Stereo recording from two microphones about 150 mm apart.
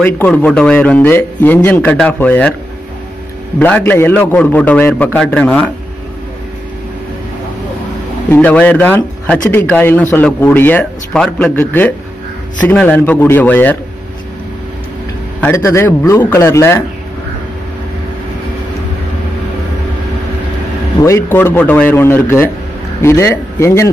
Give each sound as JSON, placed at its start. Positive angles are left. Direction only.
{"t": 0.0, "sound": "speech", "side_deg": 10}
{"t": 3.5, "sound": "speech", "side_deg": 10}
{"t": 8.3, "sound": "speech", "side_deg": 10}
{"t": 15.4, "sound": "speech", "side_deg": 15}
{"t": 21.0, "sound": "speech", "side_deg": 20}